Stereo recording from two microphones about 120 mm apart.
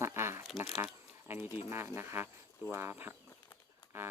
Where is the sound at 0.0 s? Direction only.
20° right (ahead or behind).